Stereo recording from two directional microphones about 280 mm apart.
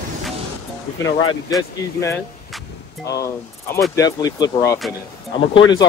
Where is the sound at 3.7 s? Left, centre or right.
Centre.